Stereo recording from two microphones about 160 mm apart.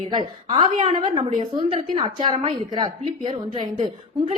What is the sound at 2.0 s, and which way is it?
A woman's voice, 35° right (ahead or behind).